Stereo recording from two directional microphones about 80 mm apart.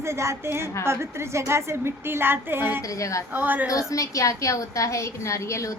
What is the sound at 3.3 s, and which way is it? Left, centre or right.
Speech, right.